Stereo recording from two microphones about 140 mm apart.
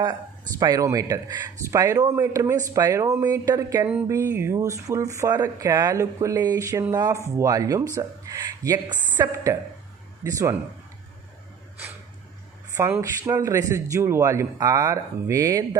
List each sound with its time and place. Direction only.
0.6 s a man's voice: 25° right (ahead or behind)
12.7 s a man's voice: 20° right (ahead or behind)